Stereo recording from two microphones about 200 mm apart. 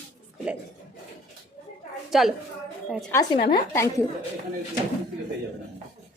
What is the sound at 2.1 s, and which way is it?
Speech, centre (ahead or behind).